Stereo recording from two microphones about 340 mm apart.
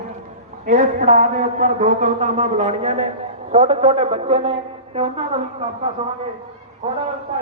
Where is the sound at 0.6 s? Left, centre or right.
Right.